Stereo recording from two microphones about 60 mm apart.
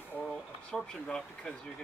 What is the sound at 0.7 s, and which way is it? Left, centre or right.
Speech, centre.